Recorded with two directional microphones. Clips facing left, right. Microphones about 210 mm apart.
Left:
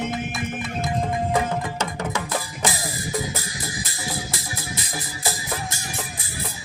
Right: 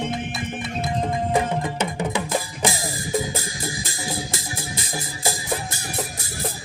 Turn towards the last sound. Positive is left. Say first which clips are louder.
# right 3 dB
turn(degrees=-25)  # may be behind; listen again after turning